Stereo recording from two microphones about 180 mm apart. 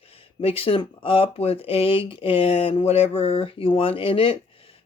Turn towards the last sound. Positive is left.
turn(degrees=30)  # may be behind; listen again after turning